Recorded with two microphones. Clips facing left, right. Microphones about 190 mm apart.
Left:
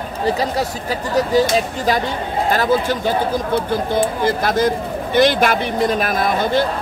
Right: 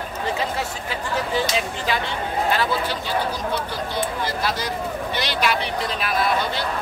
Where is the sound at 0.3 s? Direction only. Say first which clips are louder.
Left 7 dB; 40° left (ahead or behind).